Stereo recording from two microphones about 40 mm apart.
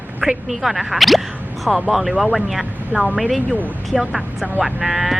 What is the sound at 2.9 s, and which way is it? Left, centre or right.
Speech, right.